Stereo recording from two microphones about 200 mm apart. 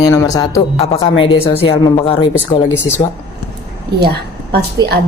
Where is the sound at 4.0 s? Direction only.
55° right (ahead or behind).